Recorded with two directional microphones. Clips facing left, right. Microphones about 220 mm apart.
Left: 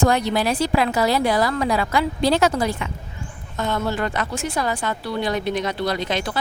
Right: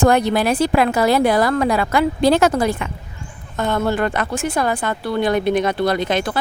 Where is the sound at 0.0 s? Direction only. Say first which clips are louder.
Right 4 dB; 55° right (ahead or behind).